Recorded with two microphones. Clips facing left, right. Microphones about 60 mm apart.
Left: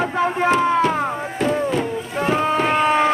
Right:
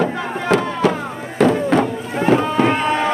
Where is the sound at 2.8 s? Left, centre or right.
Centre.